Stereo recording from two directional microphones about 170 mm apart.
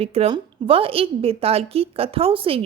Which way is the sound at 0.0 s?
35° right (ahead or behind).